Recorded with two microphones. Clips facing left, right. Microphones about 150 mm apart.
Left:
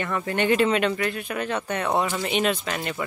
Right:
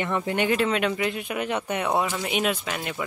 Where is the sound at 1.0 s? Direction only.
15° right (ahead or behind).